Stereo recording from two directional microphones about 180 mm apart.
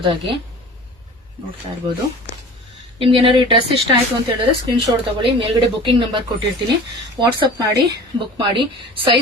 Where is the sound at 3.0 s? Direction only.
30° right (ahead or behind).